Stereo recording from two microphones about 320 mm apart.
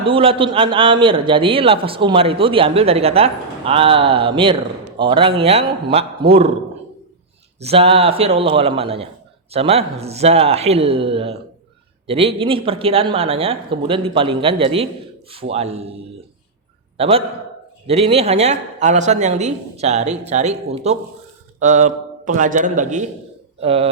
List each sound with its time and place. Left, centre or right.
0.0 s a man's voice: centre
7.6 s a man's voice: centre
17.0 s a man's voice: centre